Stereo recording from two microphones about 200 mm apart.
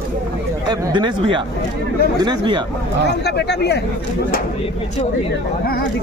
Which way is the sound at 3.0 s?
55° left (ahead or behind).